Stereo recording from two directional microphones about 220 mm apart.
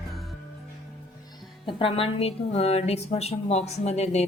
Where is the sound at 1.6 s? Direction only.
25° left (ahead or behind).